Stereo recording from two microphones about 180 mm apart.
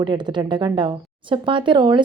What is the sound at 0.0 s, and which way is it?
Speech, 25° right (ahead or behind).